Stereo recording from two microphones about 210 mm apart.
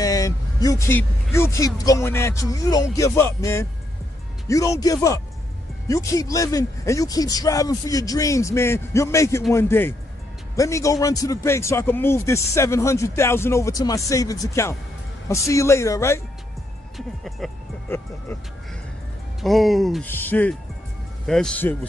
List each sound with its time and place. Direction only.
0.0 s a man's voice: 15° left (ahead or behind)
16.9 s speech: centre (ahead or behind)
17.8 s a man's voice: 10° left (ahead or behind)
19.4 s speech: centre (ahead or behind)